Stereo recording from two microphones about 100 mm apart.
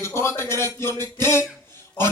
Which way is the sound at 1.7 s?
25° left (ahead or behind).